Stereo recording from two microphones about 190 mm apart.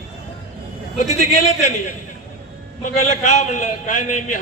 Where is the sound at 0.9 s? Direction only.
40° left (ahead or behind).